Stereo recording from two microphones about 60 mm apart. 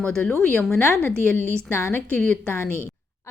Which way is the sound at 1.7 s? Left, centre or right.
Left.